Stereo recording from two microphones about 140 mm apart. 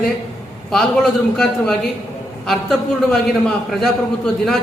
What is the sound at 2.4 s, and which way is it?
A man's voice, centre (ahead or behind).